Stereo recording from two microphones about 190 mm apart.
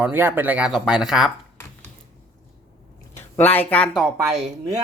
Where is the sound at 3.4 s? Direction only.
10° left (ahead or behind).